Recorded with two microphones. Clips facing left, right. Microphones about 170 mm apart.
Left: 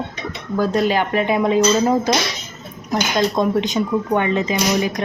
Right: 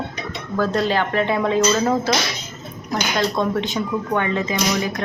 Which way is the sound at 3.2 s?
20° left (ahead or behind).